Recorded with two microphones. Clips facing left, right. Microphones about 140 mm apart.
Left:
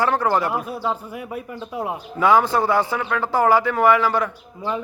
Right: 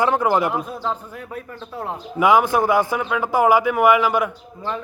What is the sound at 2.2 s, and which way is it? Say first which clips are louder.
A man's voice: right 1 dB; 15° right (ahead or behind).